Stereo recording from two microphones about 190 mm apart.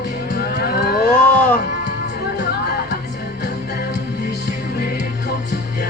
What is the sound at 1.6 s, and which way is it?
Music, 55° left (ahead or behind).